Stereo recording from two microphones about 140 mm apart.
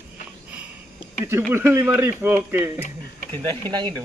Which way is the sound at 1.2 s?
15° right (ahead or behind).